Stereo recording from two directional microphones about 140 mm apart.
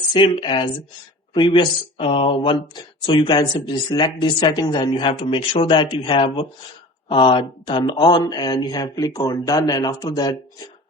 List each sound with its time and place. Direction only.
0.1 s speech: 35° left (ahead or behind)